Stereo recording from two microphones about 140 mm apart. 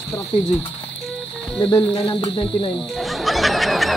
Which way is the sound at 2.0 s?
40° left (ahead or behind).